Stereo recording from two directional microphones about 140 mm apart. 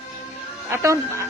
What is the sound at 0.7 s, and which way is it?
Speech, 20° right (ahead or behind).